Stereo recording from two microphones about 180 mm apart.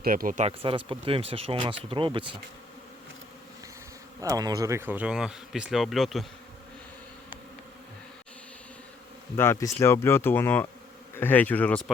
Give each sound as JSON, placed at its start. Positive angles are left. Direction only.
{"t": 0.0, "sound": "speech", "side_deg": -50}
{"t": 0.4, "sound": "speech", "side_deg": -30}
{"t": 4.2, "sound": "speech", "side_deg": -20}
{"t": 9.3, "sound": "speech", "side_deg": 15}